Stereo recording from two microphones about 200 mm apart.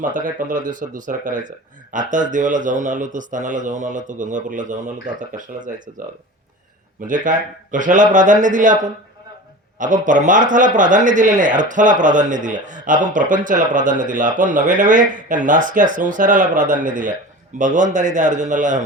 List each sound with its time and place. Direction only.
0.0 s speech: 40° right (ahead or behind)
7.1 s speech: 40° right (ahead or behind)
9.7 s speech: 40° right (ahead or behind)